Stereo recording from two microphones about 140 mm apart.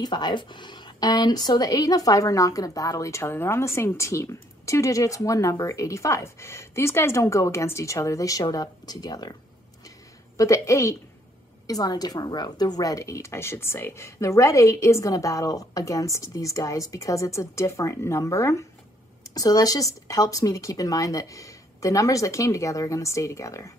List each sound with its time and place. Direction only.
0.0 s speech: 30° left (ahead or behind)